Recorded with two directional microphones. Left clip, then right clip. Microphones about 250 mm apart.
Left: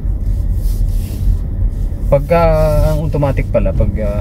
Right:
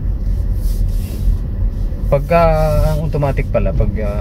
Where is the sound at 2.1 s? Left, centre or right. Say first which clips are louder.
Left 1 dB; centre.